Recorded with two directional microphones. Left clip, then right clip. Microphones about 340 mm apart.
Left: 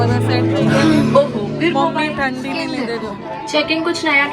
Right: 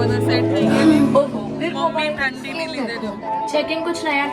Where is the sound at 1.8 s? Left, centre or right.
Centre.